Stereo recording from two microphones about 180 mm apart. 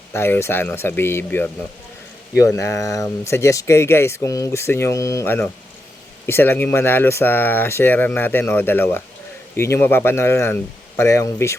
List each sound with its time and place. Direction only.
0.1 s speech: 15° left (ahead or behind)